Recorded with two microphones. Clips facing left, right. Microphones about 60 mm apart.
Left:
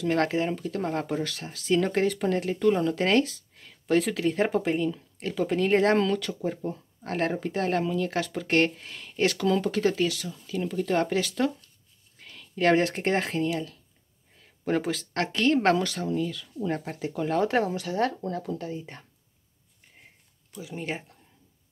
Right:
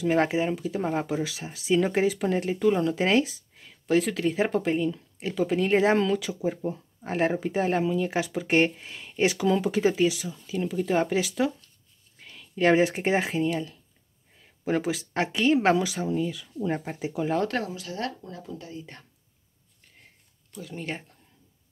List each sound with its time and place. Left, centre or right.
0.0 s a woman's voice: centre
17.8 s speech: left
18.2 s speech: left
20.5 s speech: centre